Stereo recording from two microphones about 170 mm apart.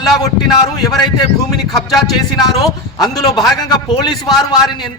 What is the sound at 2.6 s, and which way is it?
A man's voice, 20° left (ahead or behind).